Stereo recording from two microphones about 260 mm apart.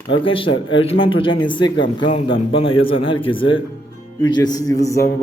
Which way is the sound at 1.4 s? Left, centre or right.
Centre.